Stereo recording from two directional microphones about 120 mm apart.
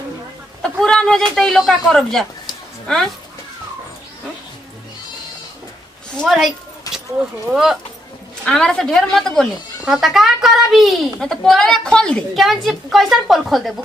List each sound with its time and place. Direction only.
0.6 s a woman's voice: 5° left (ahead or behind)
6.1 s a woman's voice: centre (ahead or behind)
6.8 s keys jangling: 30° left (ahead or behind)
7.5 s a woman's voice: 5° right (ahead or behind)